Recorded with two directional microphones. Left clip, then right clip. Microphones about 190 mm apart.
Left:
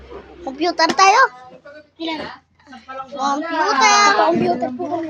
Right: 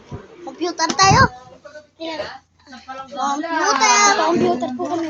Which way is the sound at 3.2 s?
40° left (ahead or behind).